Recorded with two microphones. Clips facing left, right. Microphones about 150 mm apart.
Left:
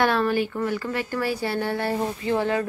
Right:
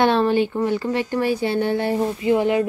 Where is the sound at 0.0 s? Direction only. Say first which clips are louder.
Right 4 dB; 25° right (ahead or behind).